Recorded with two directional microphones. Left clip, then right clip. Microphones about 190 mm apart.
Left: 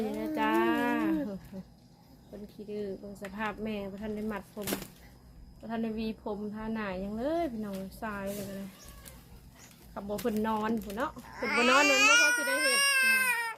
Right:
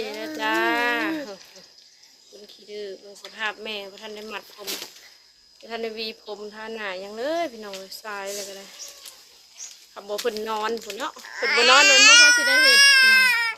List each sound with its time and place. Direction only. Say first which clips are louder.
0.0 s music: right 4 dB; 25° right (ahead or behind)
0.3 s a sound: right 6 dB; 25° right (ahead or behind)
2.6 s a sound: right 3 dB; 15° right (ahead or behind)
3.3 s speech: right 7 dB; 15° right (ahead or behind)
5.6 s speech: right 6 dB; 30° right (ahead or behind)
9.9 s speech: right 6 dB; 30° right (ahead or behind)
11.3 s speech: right 9 dB; 5° left (ahead or behind)
12.7 s baby cry: right 11 dB; 10° left (ahead or behind)